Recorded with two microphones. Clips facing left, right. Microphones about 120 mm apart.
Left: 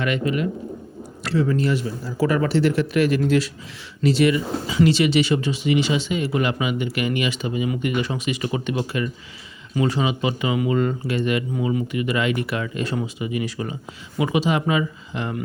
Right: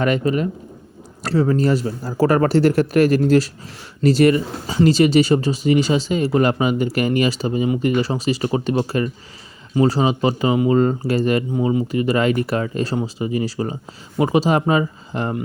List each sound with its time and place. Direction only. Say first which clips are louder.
0.0 s speech: right 4 dB; 40° right (ahead or behind)
11.5 s speech: right 4 dB; 25° right (ahead or behind)